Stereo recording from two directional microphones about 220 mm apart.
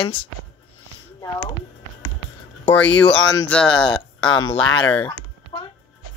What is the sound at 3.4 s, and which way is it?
Speech, 5° left (ahead or behind).